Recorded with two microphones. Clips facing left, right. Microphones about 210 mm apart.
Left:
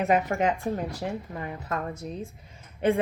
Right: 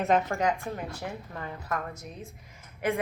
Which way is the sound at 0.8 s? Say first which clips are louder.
Left 5 dB; 35° left (ahead or behind).